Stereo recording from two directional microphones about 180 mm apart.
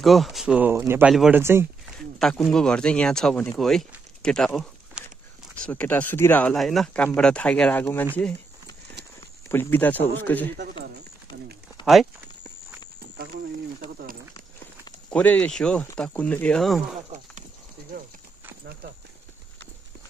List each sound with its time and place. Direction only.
0.0 s speech: centre (ahead or behind)
1.1 s speech: 5° right (ahead or behind)
1.4 s speech: 15° right (ahead or behind)
2.1 s speech: centre (ahead or behind)
9.5 s speech: 10° left (ahead or behind)
11.8 s speech: centre (ahead or behind)
15.0 s speech: 5° left (ahead or behind)
17.1 s speech: 40° right (ahead or behind)